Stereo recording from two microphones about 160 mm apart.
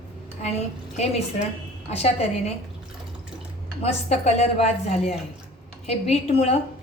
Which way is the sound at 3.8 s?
40° left (ahead or behind).